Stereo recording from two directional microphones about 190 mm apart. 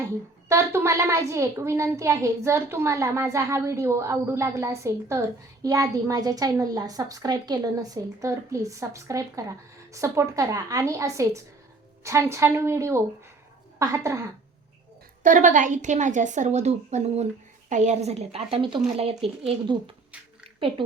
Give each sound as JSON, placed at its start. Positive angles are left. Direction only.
{"t": 0.4, "sound": "a woman's voice", "side_deg": -15}
{"t": 15.2, "sound": "a woman's voice", "side_deg": -40}